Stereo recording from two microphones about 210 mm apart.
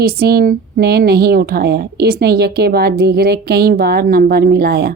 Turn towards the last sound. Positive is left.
turn(degrees=-50)  # may be behind; listen again after turning